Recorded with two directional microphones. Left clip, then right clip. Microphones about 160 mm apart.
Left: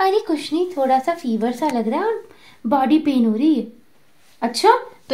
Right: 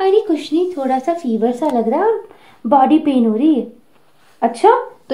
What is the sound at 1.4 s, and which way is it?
A woman's voice, 35° left (ahead or behind).